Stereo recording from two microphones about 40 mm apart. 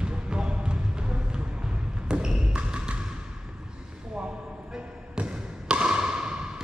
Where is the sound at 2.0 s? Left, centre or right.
Right.